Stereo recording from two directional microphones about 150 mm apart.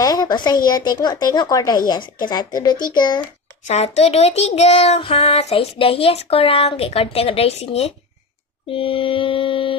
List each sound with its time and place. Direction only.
0.0 s a sound: 25° left (ahead or behind)
0.7 s a woman's voice: 30° left (ahead or behind)
3.6 s child singing: 45° left (ahead or behind)
8.7 s mantra: 35° left (ahead or behind)